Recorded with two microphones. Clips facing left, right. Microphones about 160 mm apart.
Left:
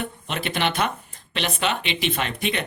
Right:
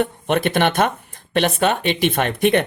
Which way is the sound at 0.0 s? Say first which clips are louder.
Right 10 dB; 55° right (ahead or behind).